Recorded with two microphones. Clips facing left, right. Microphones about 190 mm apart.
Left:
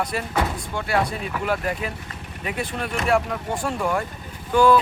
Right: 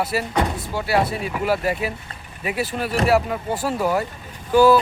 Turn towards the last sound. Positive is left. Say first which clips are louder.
# right 3 dB
turn(degrees=-5)  # may be behind; listen again after turning